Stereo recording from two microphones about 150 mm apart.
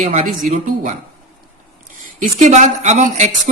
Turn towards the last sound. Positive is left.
turn(degrees=-50)  # may be behind; listen again after turning